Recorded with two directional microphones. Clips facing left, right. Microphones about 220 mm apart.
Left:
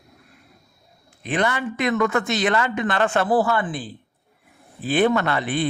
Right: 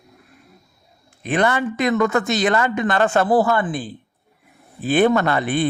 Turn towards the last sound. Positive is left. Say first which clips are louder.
# right 3 dB
turn(degrees=-50)  # may be behind; listen again after turning